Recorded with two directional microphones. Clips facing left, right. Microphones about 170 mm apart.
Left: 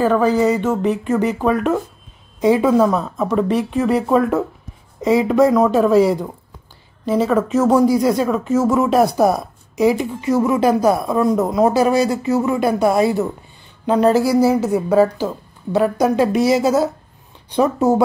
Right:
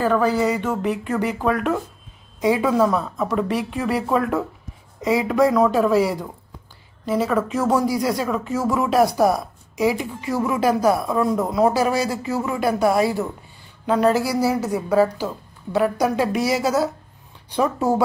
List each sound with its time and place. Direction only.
0.0 s speech: 20° left (ahead or behind)